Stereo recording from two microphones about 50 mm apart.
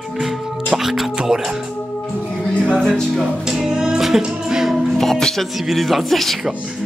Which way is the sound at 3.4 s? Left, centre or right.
Centre.